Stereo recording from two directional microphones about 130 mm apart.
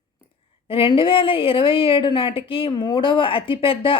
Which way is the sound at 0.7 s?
40° left (ahead or behind).